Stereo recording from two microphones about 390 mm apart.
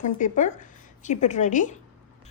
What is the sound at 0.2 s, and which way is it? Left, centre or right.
A woman's voice, centre.